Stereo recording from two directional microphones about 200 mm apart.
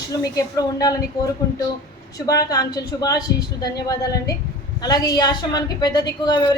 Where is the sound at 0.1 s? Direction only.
15° left (ahead or behind).